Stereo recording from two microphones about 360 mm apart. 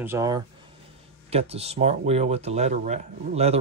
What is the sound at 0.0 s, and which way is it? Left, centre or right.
Speech, centre.